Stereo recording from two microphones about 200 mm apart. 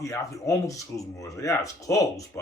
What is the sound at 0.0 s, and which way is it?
Speech, 15° left (ahead or behind).